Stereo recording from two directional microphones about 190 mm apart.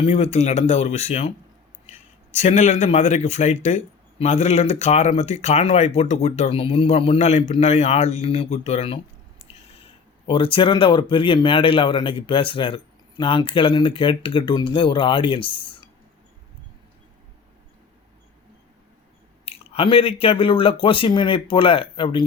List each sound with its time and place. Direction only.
0.0 s speech: 35° left (ahead or behind)
2.3 s speech: 35° left (ahead or behind)
10.2 s speech: 25° left (ahead or behind)
19.5 s speech: 30° left (ahead or behind)